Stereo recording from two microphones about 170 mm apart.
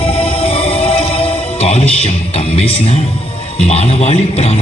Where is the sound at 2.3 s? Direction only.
35° left (ahead or behind).